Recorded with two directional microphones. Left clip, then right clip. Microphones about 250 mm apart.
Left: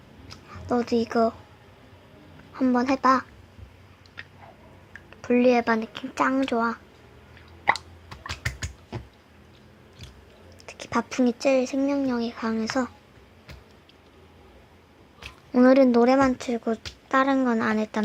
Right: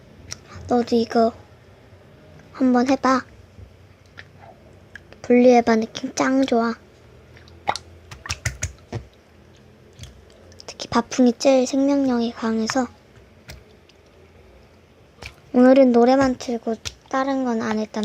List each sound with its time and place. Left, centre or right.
0.5 s a woman's voice: centre
2.5 s speech: centre
5.2 s speech: centre
10.6 s a sound: centre
11.7 s speech: centre
15.5 s speech: centre